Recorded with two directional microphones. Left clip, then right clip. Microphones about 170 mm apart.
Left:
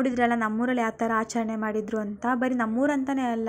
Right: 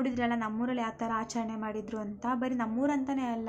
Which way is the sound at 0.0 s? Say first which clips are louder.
Left 8 dB; 30° left (ahead or behind).